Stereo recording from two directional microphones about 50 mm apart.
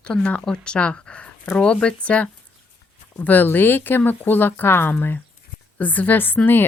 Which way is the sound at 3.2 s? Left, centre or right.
Left.